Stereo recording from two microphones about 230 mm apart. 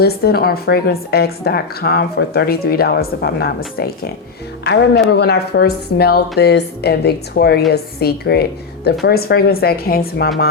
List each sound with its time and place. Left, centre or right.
0.0 s speech: left
4.6 s speech: left